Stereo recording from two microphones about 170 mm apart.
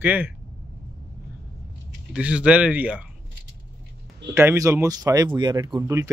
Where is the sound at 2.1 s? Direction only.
5° right (ahead or behind).